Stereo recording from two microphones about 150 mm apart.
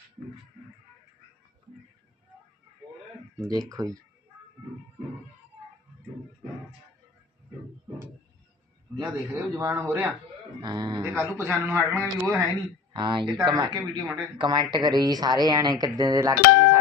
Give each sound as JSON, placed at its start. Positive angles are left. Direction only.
{"t": 3.4, "sound": "speech", "side_deg": -25}
{"t": 9.0, "sound": "speech", "side_deg": -20}
{"t": 10.6, "sound": "speech", "side_deg": -30}
{"t": 11.0, "sound": "a man's voice", "side_deg": -15}
{"t": 12.9, "sound": "speech", "side_deg": -30}